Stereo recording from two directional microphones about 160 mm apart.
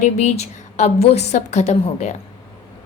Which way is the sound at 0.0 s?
45° left (ahead or behind).